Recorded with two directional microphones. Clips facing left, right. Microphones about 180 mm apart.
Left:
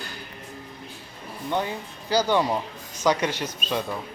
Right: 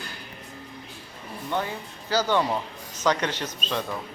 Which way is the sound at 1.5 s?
15° left (ahead or behind).